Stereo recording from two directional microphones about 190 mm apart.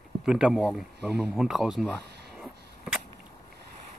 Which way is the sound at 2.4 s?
10° right (ahead or behind).